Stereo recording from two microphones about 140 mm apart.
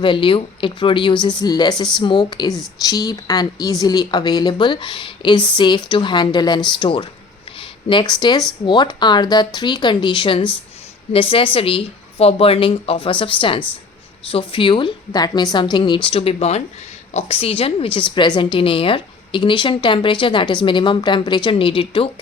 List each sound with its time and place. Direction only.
0.0 s a woman's voice: 35° left (ahead or behind)